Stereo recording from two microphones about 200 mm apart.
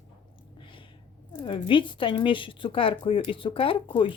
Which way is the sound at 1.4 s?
25° left (ahead or behind).